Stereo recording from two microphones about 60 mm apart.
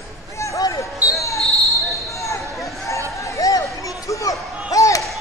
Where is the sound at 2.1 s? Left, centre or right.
Left.